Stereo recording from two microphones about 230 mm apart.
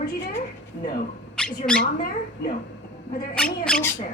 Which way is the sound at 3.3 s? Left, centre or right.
Centre.